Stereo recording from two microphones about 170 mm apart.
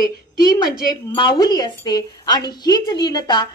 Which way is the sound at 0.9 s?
25° left (ahead or behind).